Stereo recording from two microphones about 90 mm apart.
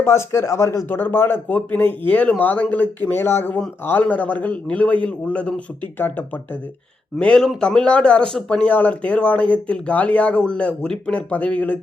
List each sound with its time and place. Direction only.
0.0 s speech: 30° left (ahead or behind)
0.9 s speech: 20° left (ahead or behind)
7.2 s speech: 10° left (ahead or behind)